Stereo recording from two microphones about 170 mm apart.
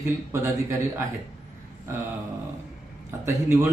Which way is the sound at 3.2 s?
15° right (ahead or behind).